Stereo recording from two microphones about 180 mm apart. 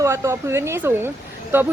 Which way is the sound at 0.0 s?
15° right (ahead or behind).